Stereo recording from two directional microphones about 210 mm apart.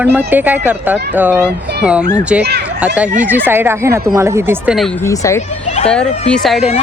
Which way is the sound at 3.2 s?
10° right (ahead or behind).